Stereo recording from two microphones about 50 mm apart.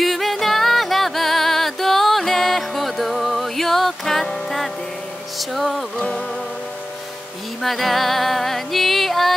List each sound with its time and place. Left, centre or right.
0.0 s music: centre
5.4 s a sound: centre
5.9 s music: left
7.6 s music: centre